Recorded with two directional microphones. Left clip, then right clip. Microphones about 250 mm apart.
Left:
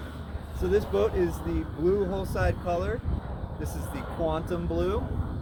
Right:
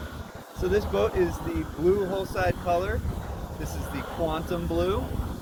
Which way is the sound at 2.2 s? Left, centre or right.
Left.